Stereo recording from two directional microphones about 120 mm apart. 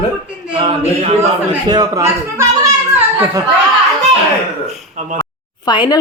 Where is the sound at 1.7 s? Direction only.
35° right (ahead or behind).